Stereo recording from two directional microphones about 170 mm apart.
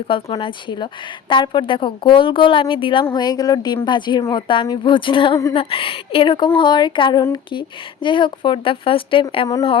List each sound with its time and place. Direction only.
0.1 s a woman's voice: 30° left (ahead or behind)